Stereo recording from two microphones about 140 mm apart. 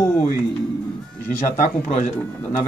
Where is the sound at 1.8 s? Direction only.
55° left (ahead or behind).